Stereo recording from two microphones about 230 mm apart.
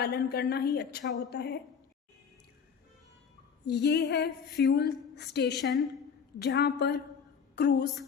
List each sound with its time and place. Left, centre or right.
0.0 s speech: left
3.7 s speech: left
5.5 s a woman's voice: centre
6.4 s a woman's voice: left